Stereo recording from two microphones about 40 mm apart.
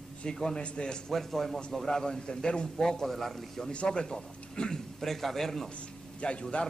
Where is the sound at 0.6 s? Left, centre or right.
Left.